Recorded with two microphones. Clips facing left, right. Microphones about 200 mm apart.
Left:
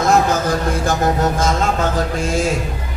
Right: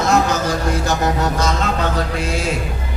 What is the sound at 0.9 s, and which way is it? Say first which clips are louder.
Music: left 4 dB; 50° left (ahead or behind).